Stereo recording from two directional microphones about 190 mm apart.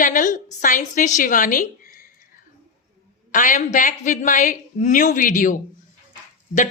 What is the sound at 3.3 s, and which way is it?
A man's voice, 45° left (ahead or behind).